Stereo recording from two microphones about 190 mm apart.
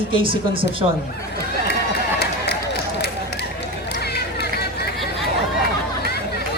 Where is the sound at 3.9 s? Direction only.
60° left (ahead or behind).